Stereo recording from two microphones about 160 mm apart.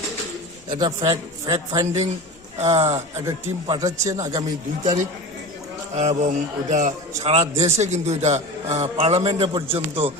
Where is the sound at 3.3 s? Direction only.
20° right (ahead or behind).